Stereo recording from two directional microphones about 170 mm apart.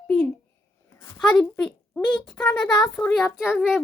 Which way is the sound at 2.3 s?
5° left (ahead or behind).